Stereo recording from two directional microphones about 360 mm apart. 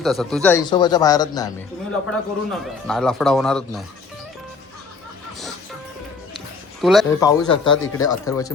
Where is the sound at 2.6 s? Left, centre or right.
Centre.